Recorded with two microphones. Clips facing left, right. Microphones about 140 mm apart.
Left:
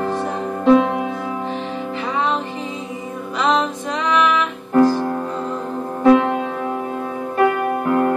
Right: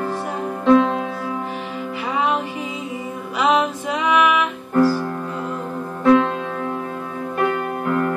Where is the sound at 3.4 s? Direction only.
10° right (ahead or behind).